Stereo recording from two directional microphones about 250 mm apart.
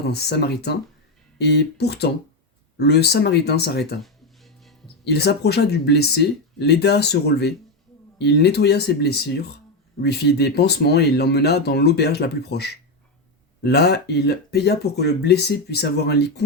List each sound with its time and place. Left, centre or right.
0.0 s speech: left
4.0 s music: centre
5.0 s speech: left